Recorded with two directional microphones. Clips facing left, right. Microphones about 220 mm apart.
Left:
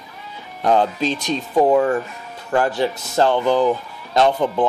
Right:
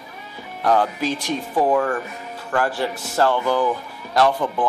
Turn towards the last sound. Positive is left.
turn(degrees=20)  # may be behind; listen again after turning